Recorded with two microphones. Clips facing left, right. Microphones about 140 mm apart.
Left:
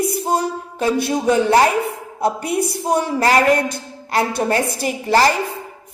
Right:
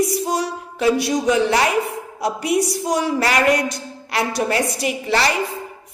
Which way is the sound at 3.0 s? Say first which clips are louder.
Left 3 dB; 35° left (ahead or behind).